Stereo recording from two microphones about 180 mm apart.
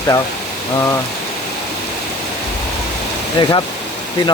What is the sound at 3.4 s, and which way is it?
Speech, 25° left (ahead or behind).